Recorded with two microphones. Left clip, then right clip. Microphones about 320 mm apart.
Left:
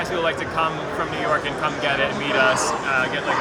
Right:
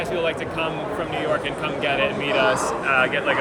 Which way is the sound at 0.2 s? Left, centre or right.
Centre.